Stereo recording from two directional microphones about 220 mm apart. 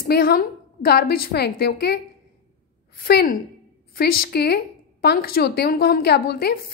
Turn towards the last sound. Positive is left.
turn(degrees=45)  # may be behind; listen again after turning